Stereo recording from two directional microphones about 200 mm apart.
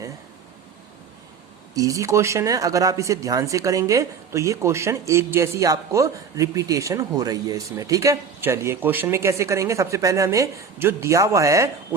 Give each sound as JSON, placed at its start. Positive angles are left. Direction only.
{"t": 1.7, "sound": "speech", "side_deg": -15}